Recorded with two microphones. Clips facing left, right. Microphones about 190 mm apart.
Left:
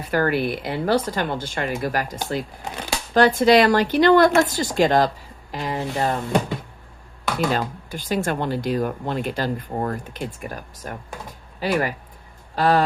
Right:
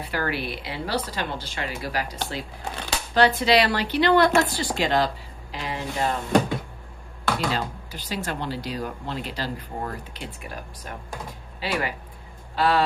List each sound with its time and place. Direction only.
0.1 s speech: 50° left (ahead or behind)
3.2 s speech: 50° left (ahead or behind)
7.3 s speech: 50° left (ahead or behind)